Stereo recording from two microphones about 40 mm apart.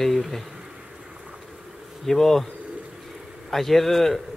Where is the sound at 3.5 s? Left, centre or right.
Centre.